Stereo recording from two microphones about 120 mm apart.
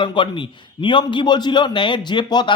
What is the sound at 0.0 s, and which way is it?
A man's voice, 45° left (ahead or behind).